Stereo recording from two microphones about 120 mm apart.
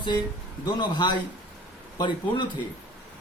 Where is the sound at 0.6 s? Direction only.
40° left (ahead or behind).